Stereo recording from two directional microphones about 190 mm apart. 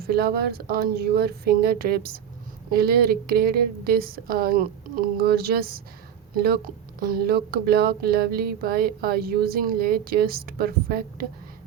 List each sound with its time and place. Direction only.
0.0 s speech: 55° right (ahead or behind)